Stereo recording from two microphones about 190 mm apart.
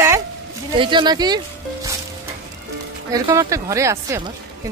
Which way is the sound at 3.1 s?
20° right (ahead or behind).